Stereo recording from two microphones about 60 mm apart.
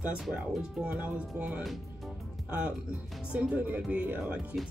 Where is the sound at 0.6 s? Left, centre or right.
Centre.